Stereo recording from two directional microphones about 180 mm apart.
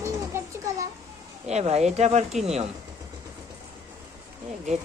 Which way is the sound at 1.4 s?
35° right (ahead or behind).